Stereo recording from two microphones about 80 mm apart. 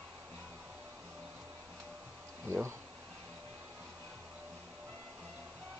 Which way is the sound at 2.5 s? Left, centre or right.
Right.